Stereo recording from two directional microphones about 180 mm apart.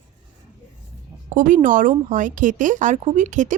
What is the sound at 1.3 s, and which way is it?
Speech, 45° right (ahead or behind).